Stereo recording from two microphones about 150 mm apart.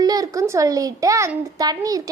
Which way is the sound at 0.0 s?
25° right (ahead or behind).